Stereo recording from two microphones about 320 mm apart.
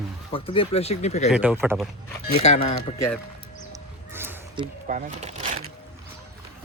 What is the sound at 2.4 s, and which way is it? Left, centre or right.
Speech, left.